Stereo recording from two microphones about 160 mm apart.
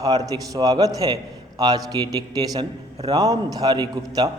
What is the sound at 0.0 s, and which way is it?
A man's voice, 25° right (ahead or behind).